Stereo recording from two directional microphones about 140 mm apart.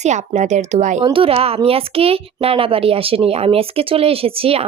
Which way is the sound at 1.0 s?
40° right (ahead or behind).